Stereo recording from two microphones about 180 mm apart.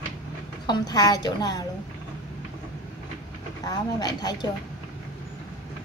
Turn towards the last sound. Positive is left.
turn(degrees=20)  # may be behind; listen again after turning